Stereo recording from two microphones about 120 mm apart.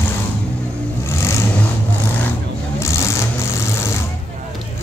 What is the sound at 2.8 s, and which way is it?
Vehicle, 25° left (ahead or behind).